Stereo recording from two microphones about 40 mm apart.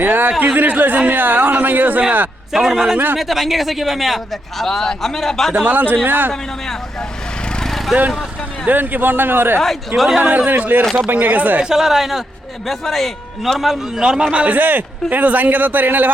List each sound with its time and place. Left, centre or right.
0.0 s a man's voice: right
2.5 s a man's voice: centre
4.6 s a man's voice: centre
5.6 s a man's voice: right
7.4 s a sound: left
7.7 s vehicle: centre
8.6 s speech: right
10.2 s speech: right
10.5 s a man's voice: right
11.6 s speech: centre
14.0 s a man's voice: centre
14.4 s a man's voice: right